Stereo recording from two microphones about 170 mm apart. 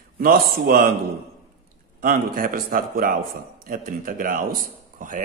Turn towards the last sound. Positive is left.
turn(degrees=-50)  # may be behind; listen again after turning